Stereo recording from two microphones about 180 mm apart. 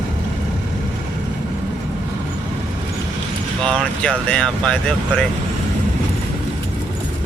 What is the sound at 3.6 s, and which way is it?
Speech, 5° left (ahead or behind).